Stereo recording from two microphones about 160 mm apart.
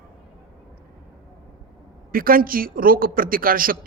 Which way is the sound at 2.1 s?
65° right (ahead or behind).